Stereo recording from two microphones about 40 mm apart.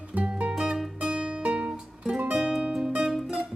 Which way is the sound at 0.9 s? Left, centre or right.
Right.